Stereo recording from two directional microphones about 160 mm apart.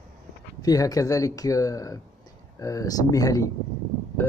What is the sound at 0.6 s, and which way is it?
Speech, 20° left (ahead or behind).